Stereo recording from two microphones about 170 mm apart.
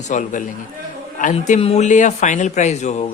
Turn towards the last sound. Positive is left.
turn(degrees=40)  # may be behind; listen again after turning